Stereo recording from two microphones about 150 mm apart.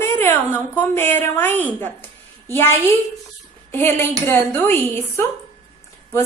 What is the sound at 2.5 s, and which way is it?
A woman's voice, 15° left (ahead or behind).